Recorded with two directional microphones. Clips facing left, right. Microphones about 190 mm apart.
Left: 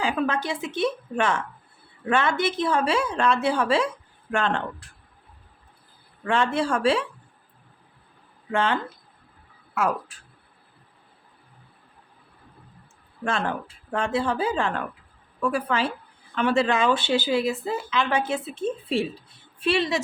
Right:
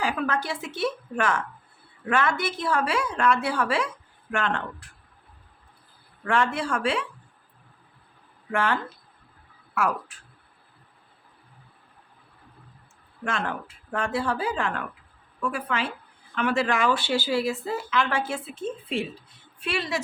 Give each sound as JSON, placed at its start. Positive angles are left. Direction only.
{"t": 0.0, "sound": "speech", "side_deg": 25}
{"t": 6.2, "sound": "speech", "side_deg": 25}
{"t": 8.5, "sound": "speech", "side_deg": 20}
{"t": 13.2, "sound": "a woman's voice", "side_deg": 30}
{"t": 19.6, "sound": "speech", "side_deg": 25}